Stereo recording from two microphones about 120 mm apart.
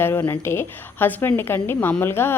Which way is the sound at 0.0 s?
20° left (ahead or behind).